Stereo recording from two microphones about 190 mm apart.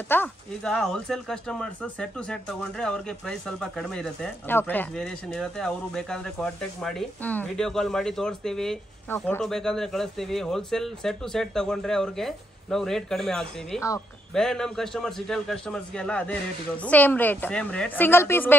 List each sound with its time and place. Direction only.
0.1 s speech: 10° left (ahead or behind)
13.7 s a man's voice: 15° left (ahead or behind)
14.3 s a man's voice: centre (ahead or behind)